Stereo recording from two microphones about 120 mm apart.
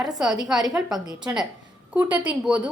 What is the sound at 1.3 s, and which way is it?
Speech, 25° right (ahead or behind).